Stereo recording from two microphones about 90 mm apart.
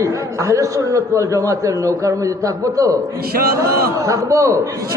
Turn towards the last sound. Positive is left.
turn(degrees=-35)  # may be behind; listen again after turning